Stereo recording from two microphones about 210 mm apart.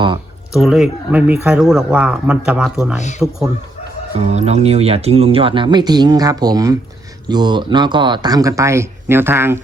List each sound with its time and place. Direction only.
0.5 s speech: centre (ahead or behind)
4.2 s speech: 30° right (ahead or behind); by 9.6 s 10° right (ahead or behind)